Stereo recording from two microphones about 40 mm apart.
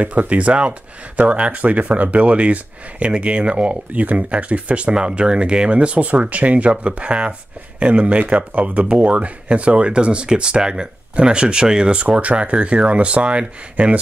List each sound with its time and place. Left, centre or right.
0.0 s speech: right